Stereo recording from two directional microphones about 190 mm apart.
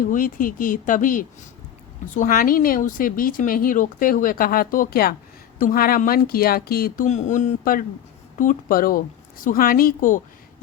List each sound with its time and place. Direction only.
0.0 s a woman's voice: 45° left (ahead or behind)